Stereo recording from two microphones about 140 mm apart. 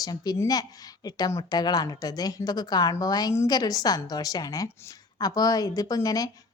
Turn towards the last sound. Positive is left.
turn(degrees=25)  # may be behind; listen again after turning